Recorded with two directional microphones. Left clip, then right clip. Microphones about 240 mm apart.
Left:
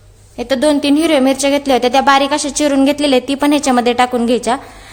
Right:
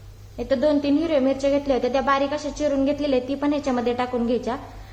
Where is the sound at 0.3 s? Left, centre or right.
Left.